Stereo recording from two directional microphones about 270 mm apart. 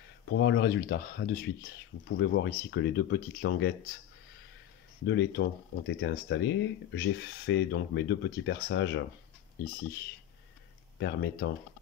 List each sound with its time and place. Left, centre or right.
0.3 s speech: left
5.0 s speech: left
11.0 s speech: left